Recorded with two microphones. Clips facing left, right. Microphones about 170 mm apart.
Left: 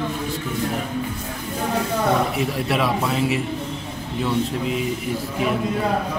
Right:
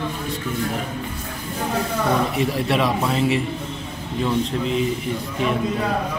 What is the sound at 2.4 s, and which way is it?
A man's voice, centre (ahead or behind).